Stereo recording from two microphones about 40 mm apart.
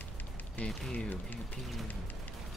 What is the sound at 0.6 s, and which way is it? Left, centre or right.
Speech, left.